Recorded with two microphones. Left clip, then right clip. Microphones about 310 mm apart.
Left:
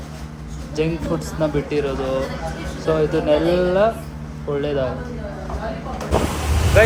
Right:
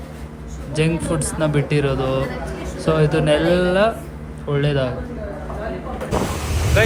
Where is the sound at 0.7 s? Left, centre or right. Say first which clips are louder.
Right 1 dB; right.